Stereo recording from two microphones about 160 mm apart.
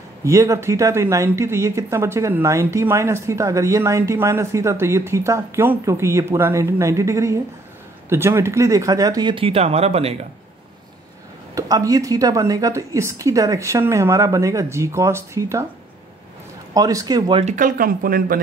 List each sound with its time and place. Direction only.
0.2 s speech: 20° right (ahead or behind); by 10.1 s 40° right (ahead or behind)
11.5 s speech: 20° right (ahead or behind)
16.7 s speech: 25° right (ahead or behind)
17.4 s speech: 50° right (ahead or behind)